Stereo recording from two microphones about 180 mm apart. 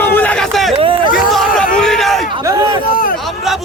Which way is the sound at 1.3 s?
Centre (ahead or behind).